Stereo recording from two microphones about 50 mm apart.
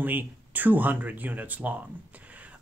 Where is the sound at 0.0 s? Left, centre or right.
Right.